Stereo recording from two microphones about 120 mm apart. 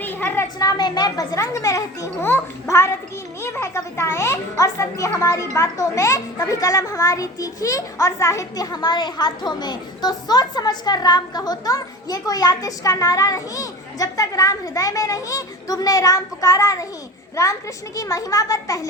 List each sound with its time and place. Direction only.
0.0 s a sound: 15° left (ahead or behind)
0.6 s a child's voice: 35° left (ahead or behind)
17.9 s a child's voice: 30° left (ahead or behind)